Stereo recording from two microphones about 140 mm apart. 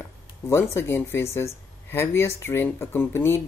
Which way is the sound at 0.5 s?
20° left (ahead or behind).